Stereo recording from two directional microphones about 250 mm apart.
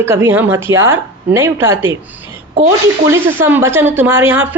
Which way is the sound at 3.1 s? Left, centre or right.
Centre.